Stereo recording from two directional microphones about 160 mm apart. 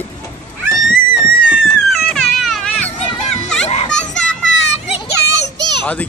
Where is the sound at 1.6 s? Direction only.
5° left (ahead or behind).